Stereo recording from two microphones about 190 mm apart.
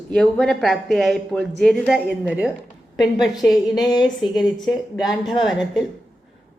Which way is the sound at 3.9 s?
20° left (ahead or behind).